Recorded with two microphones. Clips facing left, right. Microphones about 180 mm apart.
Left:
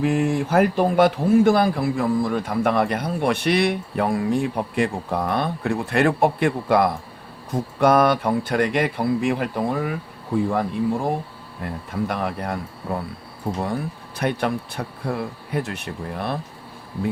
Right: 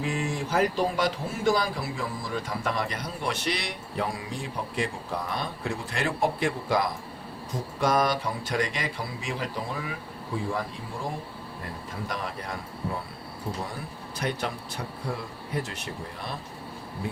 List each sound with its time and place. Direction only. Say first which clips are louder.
0.0 s a man's voice: left 9 dB; 55° left (ahead or behind)
14.2 s a man's voice: left 8 dB; 60° left (ahead or behind)